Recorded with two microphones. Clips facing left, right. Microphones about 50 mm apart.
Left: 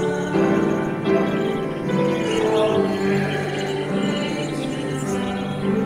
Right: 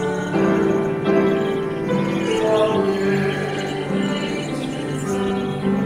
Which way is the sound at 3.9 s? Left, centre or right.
Right.